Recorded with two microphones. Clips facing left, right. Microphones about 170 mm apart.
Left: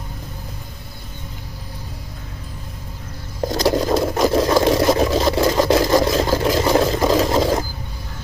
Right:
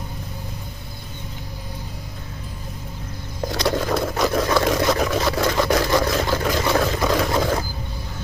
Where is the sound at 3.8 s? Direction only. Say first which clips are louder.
Left 4 dB; 30° left (ahead or behind).